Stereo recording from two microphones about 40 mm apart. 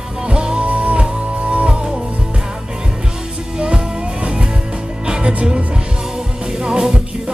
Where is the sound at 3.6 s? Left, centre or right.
Right.